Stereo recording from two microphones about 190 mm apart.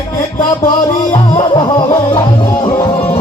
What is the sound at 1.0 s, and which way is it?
Music, 25° left (ahead or behind).